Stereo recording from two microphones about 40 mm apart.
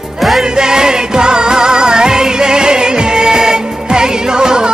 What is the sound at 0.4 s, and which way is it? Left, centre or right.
Music, centre.